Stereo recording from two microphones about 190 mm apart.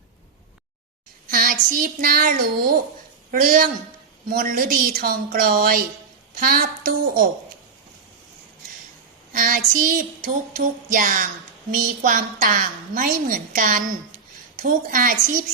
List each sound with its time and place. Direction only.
1.3 s a woman's voice: 50° right (ahead or behind)
9.3 s child singing: 45° right (ahead or behind)
10.6 s a woman's voice: 45° right (ahead or behind)